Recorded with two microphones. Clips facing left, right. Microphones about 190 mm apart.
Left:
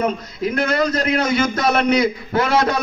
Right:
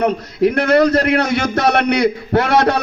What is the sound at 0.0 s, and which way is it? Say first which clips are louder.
A man's voice: right 6 dB; 65° right (ahead or behind).